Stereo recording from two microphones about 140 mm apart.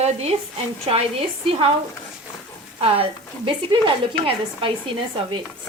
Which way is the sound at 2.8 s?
45° right (ahead or behind).